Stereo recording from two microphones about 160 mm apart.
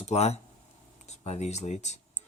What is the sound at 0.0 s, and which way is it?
Speech, 40° left (ahead or behind).